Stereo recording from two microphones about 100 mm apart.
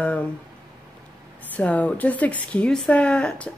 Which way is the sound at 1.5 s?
15° left (ahead or behind).